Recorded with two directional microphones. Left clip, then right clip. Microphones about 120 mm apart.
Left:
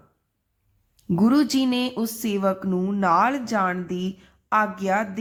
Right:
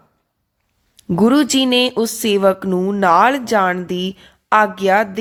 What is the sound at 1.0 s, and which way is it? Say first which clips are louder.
Speech: right 7 dB; 45° right (ahead or behind).